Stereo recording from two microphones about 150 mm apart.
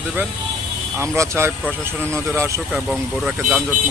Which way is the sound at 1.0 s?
20° right (ahead or behind).